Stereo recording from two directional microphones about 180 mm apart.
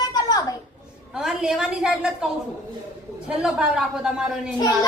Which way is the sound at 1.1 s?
Centre (ahead or behind).